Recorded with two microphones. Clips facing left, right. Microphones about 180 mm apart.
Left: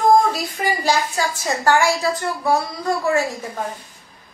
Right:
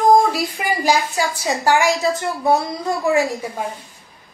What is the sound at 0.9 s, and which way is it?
A woman's voice, 15° right (ahead or behind).